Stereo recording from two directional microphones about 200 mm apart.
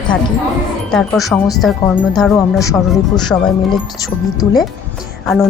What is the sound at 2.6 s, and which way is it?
Speech, 20° left (ahead or behind).